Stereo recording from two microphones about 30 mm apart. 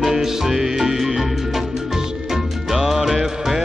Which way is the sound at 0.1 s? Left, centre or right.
Centre.